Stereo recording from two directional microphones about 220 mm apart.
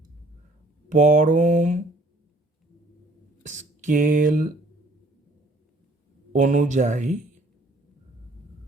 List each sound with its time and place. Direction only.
0.9 s mantra: 35° right (ahead or behind)
3.4 s speech: 35° right (ahead or behind)
6.3 s mantra: 35° right (ahead or behind)